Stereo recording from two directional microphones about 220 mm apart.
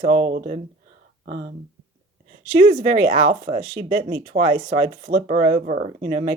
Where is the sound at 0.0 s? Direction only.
35° right (ahead or behind).